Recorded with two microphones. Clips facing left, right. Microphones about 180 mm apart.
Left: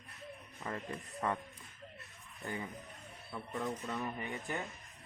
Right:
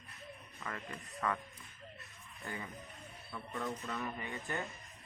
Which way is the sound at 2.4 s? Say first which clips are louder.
Left 3 dB; 20° left (ahead or behind).